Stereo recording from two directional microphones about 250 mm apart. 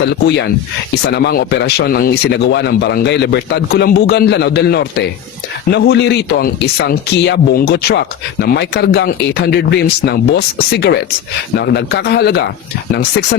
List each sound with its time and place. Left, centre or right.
0.1 s a man's voice: left